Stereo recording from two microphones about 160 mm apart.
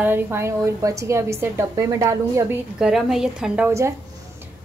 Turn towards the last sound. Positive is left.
turn(degrees=-20)  # may be behind; listen again after turning